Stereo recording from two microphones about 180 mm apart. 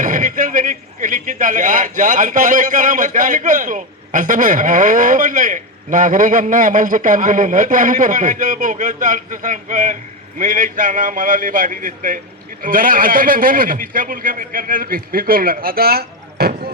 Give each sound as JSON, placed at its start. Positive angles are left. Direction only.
{"t": 0.0, "sound": "a man's voice", "side_deg": -45}